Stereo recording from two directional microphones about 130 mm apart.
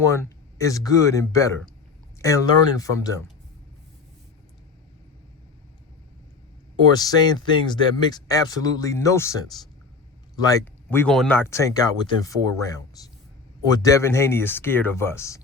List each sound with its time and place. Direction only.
0.1 s speech: 25° left (ahead or behind)
6.9 s speech: 30° left (ahead or behind)
10.8 s speech: 10° left (ahead or behind)